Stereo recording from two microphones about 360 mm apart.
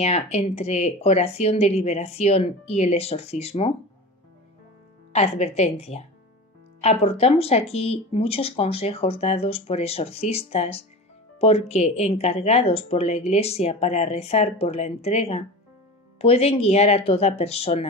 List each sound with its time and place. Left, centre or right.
0.0 s speech: centre
5.1 s speech: centre